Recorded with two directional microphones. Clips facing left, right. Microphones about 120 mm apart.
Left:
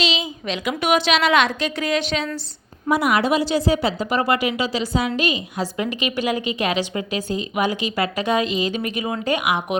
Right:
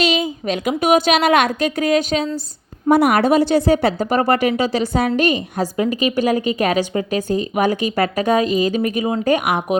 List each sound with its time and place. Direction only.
0.0 s a woman's voice: 50° right (ahead or behind)
2.9 s a woman's voice: 55° right (ahead or behind)
5.7 s a woman's voice: 35° right (ahead or behind)